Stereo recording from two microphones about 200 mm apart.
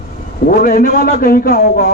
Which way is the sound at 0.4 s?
45° left (ahead or behind).